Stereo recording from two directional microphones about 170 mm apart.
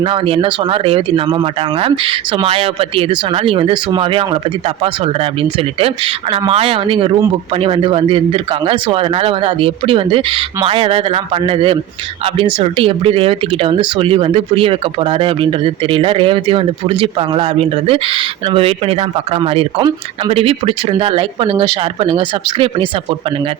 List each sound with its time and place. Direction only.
0.0 s speech: 30° right (ahead or behind)
6.3 s speech: 35° right (ahead or behind)